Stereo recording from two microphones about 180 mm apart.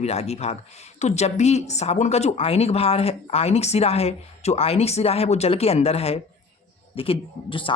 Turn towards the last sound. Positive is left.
turn(degrees=30)  # may be behind; listen again after turning